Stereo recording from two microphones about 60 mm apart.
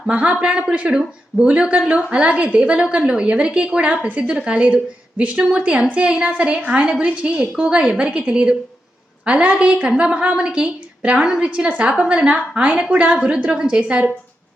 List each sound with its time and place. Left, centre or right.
0.1 s a woman's voice: centre